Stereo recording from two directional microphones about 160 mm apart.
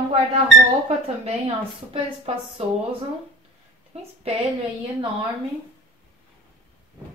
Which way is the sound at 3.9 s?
40° right (ahead or behind).